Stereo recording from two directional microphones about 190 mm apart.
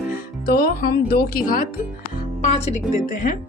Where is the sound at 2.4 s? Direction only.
35° left (ahead or behind).